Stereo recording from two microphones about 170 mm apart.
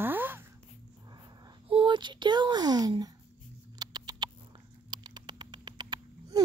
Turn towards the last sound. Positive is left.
turn(degrees=-25)  # may be behind; listen again after turning